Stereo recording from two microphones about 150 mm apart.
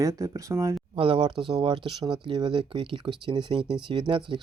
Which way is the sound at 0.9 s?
35° right (ahead or behind).